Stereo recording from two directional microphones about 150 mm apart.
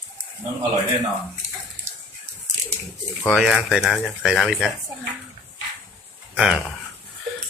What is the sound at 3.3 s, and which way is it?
A man's voice, 5° right (ahead or behind).